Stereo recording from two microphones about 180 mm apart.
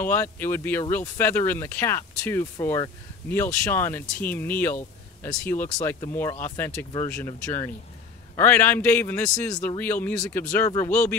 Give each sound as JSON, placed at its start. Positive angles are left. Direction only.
{"t": 0.0, "sound": "speech", "side_deg": 10}